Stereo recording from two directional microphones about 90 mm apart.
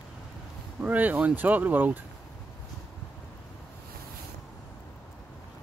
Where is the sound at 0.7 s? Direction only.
15° right (ahead or behind).